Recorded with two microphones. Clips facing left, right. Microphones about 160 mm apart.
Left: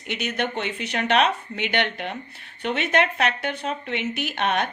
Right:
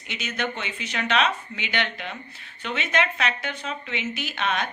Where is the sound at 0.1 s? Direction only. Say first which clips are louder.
Left 4 dB; 60° left (ahead or behind).